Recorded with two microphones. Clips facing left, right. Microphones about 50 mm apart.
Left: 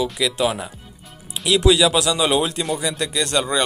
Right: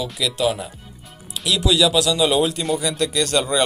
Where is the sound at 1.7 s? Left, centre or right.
Left.